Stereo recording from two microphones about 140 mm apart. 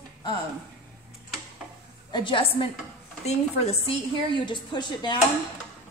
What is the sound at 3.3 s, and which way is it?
Speech, 50° left (ahead or behind).